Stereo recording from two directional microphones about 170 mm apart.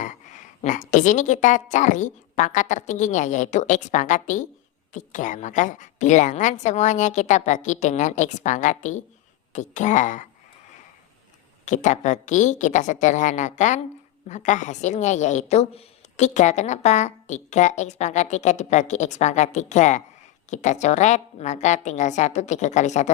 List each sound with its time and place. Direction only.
0.0 s a woman's voice: 45° left (ahead or behind)
11.6 s a woman's voice: 45° left (ahead or behind)